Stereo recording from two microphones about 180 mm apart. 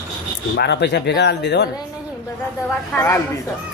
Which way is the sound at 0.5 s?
70° left (ahead or behind).